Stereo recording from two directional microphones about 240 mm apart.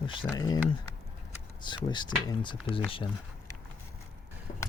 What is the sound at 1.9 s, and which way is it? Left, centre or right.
Speech, centre.